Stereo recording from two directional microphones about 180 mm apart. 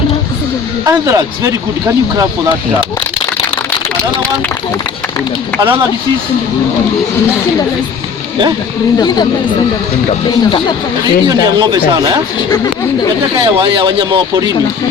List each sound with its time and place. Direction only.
0.9 s speech: 20° right (ahead or behind)
5.5 s speech: 30° right (ahead or behind)
10.1 s speech: 25° left (ahead or behind)
11.0 s speech: 20° right (ahead or behind)
13.4 s speech: 30° right (ahead or behind)